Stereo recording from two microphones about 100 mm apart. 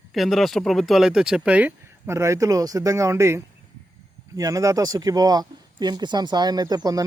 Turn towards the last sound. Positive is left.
turn(degrees=-40)  # may be behind; listen again after turning